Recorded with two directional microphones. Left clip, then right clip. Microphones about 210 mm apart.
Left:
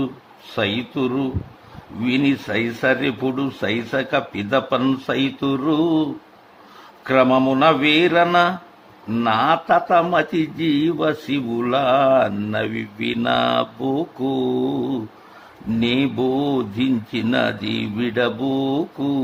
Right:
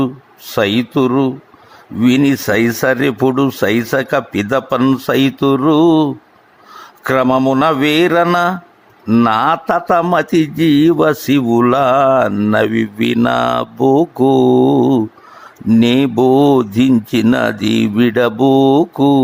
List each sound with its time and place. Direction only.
0.5 s speech: 45° right (ahead or behind)